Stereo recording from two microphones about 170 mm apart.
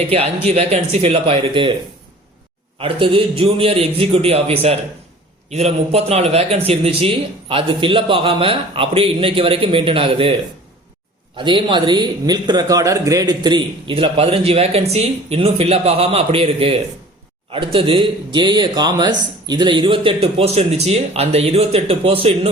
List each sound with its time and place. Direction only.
0.1 s a man's voice: 35° right (ahead or behind)
2.7 s a man's voice: 30° right (ahead or behind)
11.3 s a man's voice: 25° right (ahead or behind)